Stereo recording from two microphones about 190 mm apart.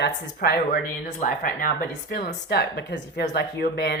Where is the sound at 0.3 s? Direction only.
55° left (ahead or behind).